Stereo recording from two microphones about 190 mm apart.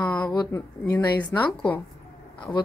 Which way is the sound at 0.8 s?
10° left (ahead or behind).